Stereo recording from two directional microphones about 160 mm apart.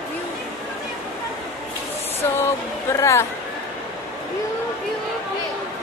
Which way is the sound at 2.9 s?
20° left (ahead or behind).